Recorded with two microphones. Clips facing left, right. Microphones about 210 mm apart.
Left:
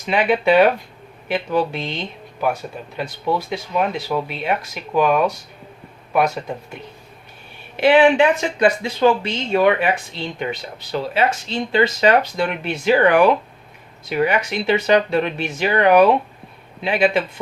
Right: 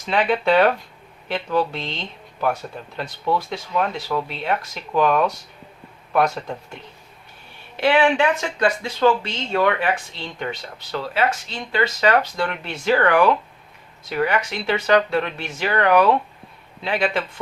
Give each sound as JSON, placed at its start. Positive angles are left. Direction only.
{"t": 0.0, "sound": "speech", "side_deg": 15}
{"t": 7.8, "sound": "speech", "side_deg": 15}